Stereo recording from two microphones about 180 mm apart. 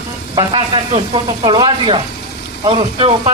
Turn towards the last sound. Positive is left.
turn(degrees=-30)  # may be behind; listen again after turning